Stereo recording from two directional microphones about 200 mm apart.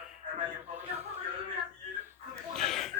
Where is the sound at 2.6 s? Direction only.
Centre (ahead or behind).